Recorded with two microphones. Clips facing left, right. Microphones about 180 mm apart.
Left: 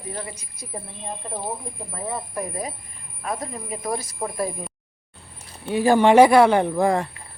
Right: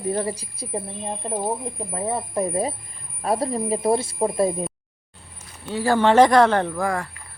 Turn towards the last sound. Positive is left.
turn(degrees=20)  # may be behind; listen again after turning